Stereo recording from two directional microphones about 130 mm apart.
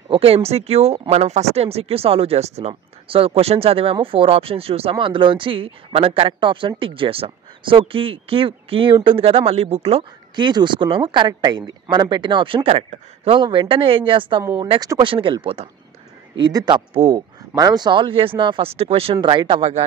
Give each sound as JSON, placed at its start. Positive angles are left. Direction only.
{"t": 0.1, "sound": "speech", "side_deg": -50}
{"t": 16.3, "sound": "speech", "side_deg": -35}
{"t": 17.6, "sound": "speech", "side_deg": -30}